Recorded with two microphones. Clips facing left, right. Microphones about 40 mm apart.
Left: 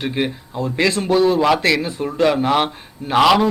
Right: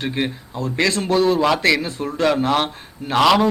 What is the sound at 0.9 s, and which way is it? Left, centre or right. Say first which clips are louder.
Speech: left 2 dB; centre.